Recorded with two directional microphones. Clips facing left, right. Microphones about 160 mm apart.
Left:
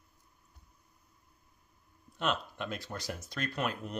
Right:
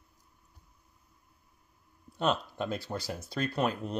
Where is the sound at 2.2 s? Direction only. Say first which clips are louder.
Right 4 dB; 35° right (ahead or behind).